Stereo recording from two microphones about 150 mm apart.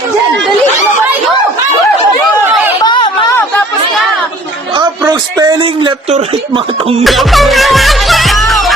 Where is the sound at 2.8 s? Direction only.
30° left (ahead or behind).